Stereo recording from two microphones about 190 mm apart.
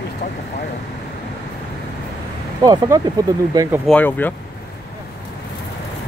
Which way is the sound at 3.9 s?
10° left (ahead or behind).